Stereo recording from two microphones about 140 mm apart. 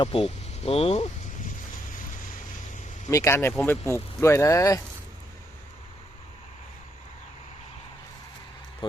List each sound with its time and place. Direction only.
0.0 s speech: 40° left (ahead or behind)
1.9 s boat: 75° left (ahead or behind)
3.1 s speech: 20° left (ahead or behind)